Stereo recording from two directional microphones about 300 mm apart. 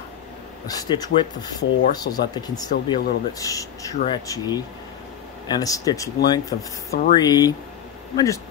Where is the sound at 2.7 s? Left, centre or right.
Left.